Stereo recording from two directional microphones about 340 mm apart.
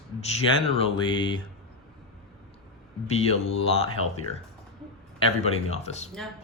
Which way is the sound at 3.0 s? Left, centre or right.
Centre.